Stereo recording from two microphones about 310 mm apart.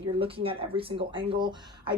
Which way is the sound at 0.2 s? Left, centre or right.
Centre.